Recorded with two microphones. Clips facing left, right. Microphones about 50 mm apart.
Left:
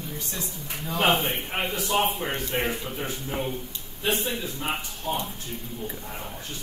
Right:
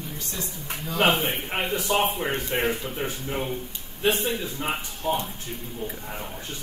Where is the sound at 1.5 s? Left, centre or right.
Right.